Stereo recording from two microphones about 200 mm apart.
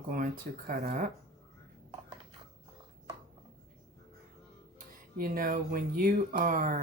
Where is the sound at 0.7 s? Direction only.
45° right (ahead or behind).